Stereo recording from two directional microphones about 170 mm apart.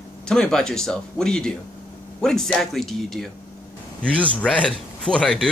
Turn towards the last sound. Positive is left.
turn(degrees=5)  # may be behind; listen again after turning